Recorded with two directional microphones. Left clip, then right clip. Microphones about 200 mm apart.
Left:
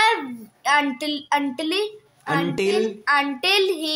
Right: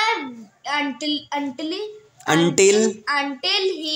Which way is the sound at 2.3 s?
45° right (ahead or behind).